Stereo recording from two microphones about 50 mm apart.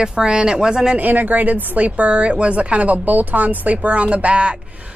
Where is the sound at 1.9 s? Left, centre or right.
Right.